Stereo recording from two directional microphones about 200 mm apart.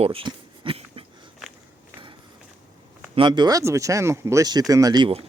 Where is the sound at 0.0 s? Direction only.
25° right (ahead or behind).